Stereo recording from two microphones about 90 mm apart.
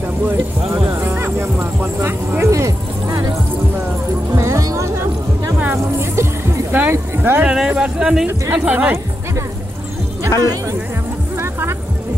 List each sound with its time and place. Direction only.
0.8 s speech: 25° right (ahead or behind)
4.4 s music: 35° right (ahead or behind)
5.7 s speech: 30° right (ahead or behind)
7.4 s speech: 10° right (ahead or behind)
10.4 s speech: 45° right (ahead or behind)